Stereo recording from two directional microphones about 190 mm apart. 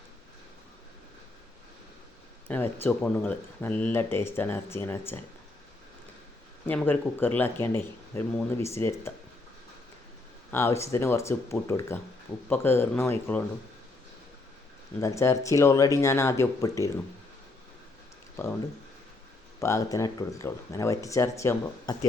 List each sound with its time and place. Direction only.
2.5 s speech: 10° left (ahead or behind)
6.7 s speech: 10° left (ahead or behind)
10.5 s speech: 15° left (ahead or behind)
15.0 s speech: 15° left (ahead or behind)
18.4 s speech: 15° left (ahead or behind)
19.5 s speech: 15° left (ahead or behind)